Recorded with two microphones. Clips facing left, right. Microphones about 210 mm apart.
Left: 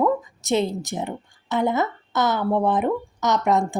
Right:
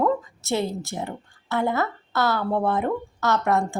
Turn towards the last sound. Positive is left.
turn(degrees=15)  # may be behind; listen again after turning